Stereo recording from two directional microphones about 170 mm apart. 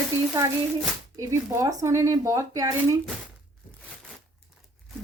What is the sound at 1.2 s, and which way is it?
Speech, 20° right (ahead or behind).